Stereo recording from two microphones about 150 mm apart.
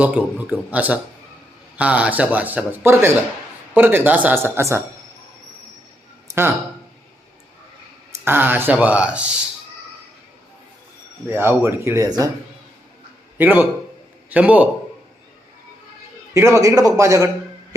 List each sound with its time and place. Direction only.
0.0 s speech: 10° right (ahead or behind)
6.2 s a sound: 15° right (ahead or behind)
8.2 s speech: 15° right (ahead or behind)
11.3 s speech: 15° right (ahead or behind)
13.4 s speech: 10° right (ahead or behind)
16.3 s a man's voice: 20° right (ahead or behind)